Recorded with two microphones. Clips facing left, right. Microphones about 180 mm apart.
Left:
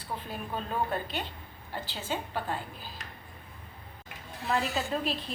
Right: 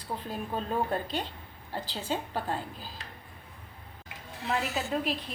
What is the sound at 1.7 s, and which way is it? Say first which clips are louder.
Speech: right 2 dB; 35° right (ahead or behind).